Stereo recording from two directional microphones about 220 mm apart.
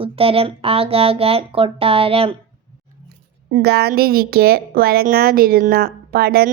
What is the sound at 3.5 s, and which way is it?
A woman's voice, 45° right (ahead or behind).